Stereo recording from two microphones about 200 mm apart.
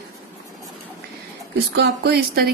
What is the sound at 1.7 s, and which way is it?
Speech, 55° right (ahead or behind).